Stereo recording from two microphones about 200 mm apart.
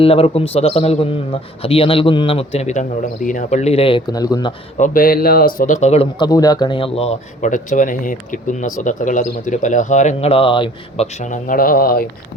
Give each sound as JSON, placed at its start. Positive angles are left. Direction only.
{"t": 0.0, "sound": "a man's voice", "side_deg": 30}
{"t": 4.8, "sound": "speech", "side_deg": 45}